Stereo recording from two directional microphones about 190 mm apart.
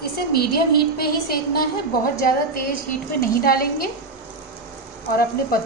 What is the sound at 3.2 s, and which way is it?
Speech, 50° left (ahead or behind).